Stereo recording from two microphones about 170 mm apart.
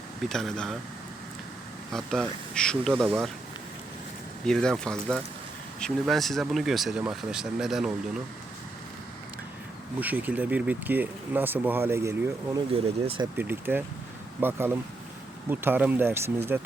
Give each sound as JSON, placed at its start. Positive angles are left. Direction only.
{"t": 0.2, "sound": "speech", "side_deg": 0}
{"t": 1.9, "sound": "speech", "side_deg": 0}
{"t": 4.4, "sound": "speech", "side_deg": 5}
{"t": 10.0, "sound": "speech", "side_deg": -10}
{"t": 12.7, "sound": "speech", "side_deg": -35}
{"t": 13.3, "sound": "speech", "side_deg": -10}